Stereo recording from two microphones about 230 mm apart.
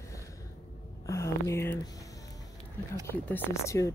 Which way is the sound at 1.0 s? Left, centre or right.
Centre.